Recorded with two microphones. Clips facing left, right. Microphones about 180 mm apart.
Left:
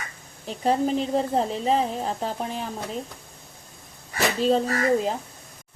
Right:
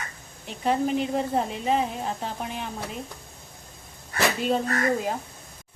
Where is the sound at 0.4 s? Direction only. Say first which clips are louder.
Left 2 dB; 35° left (ahead or behind).